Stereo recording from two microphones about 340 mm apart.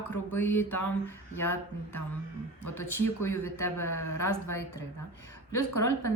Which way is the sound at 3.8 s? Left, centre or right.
Left.